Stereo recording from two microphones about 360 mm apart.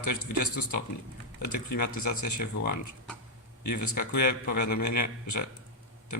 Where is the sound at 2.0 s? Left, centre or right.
Left.